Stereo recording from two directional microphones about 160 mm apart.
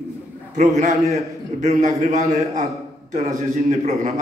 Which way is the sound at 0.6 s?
50° right (ahead or behind).